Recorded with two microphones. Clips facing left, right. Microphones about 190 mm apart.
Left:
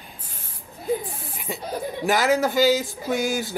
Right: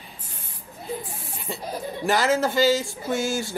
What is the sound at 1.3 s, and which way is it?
Chuckle, 15° left (ahead or behind).